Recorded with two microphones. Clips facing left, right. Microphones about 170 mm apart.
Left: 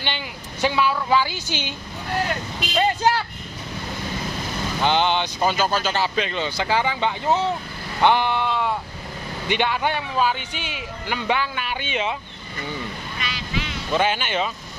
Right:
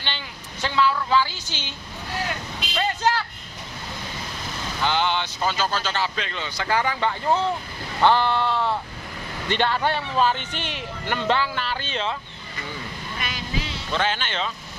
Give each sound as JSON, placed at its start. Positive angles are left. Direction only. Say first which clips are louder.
{"t": 0.0, "sound": "speech", "louder": "left 4 dB", "side_deg": 15}
{"t": 2.7, "sound": "vehicle", "louder": "left 3 dB", "side_deg": 15}
{"t": 4.8, "sound": "speech", "louder": "left 3 dB", "side_deg": 20}
{"t": 13.2, "sound": "vehicle", "louder": "left 1 dB", "side_deg": -45}
{"t": 13.9, "sound": "speech", "louder": "left 4 dB", "side_deg": 10}